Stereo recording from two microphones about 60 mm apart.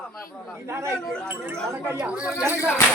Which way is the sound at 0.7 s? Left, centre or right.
Right.